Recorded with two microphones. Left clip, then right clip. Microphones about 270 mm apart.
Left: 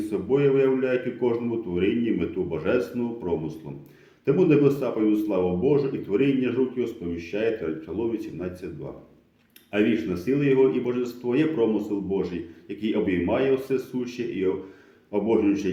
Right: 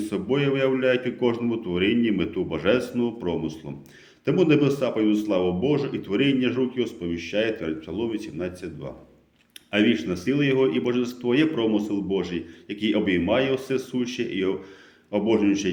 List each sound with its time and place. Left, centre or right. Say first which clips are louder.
0.0 s a man's voice: left 2 dB; right